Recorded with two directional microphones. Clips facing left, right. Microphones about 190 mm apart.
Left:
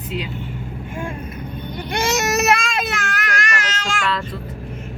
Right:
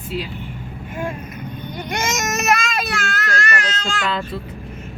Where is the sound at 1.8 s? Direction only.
30° left (ahead or behind); by 3.5 s 15° left (ahead or behind).